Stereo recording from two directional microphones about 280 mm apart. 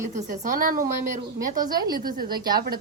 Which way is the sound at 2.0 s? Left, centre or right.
Right.